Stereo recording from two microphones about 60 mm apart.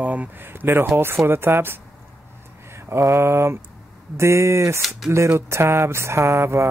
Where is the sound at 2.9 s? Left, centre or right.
Right.